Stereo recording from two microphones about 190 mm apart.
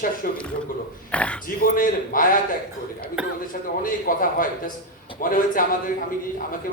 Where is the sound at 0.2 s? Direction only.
50° left (ahead or behind).